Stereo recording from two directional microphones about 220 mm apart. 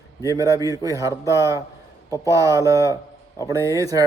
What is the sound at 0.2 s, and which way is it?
Speech, 15° right (ahead or behind).